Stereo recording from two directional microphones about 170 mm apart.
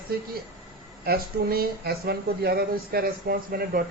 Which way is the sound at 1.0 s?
65° right (ahead or behind).